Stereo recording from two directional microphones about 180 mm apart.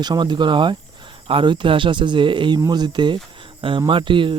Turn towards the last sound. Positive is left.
turn(degrees=-30)  # may be behind; listen again after turning